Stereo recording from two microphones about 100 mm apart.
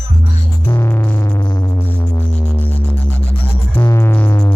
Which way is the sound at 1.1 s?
30° left (ahead or behind).